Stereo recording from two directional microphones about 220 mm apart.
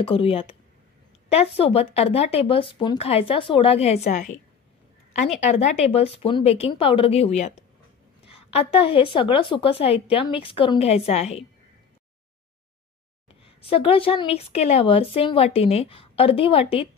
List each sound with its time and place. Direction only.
0.0 s a woman's voice: 25° left (ahead or behind)
13.6 s a woman's voice: 25° left (ahead or behind)